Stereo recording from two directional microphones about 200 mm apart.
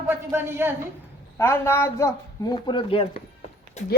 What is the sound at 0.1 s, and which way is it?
Speech, 10° right (ahead or behind).